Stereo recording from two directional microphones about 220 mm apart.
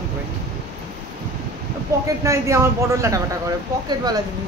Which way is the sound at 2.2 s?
15° right (ahead or behind).